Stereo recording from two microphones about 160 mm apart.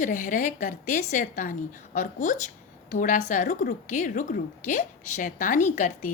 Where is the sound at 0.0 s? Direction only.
50° left (ahead or behind).